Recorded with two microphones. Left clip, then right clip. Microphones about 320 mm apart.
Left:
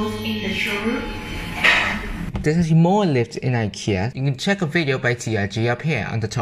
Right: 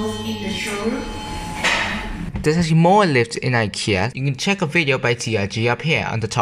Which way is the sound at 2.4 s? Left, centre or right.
Centre.